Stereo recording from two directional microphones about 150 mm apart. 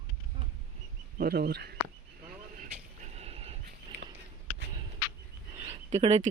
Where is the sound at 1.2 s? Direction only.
85° right.